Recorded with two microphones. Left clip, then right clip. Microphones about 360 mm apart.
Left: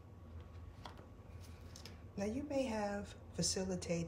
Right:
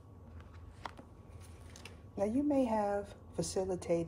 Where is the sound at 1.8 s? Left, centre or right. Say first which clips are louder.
Right 7 dB; centre.